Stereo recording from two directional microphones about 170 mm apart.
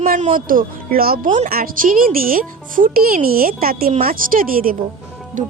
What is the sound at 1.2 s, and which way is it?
Speech, 30° right (ahead or behind).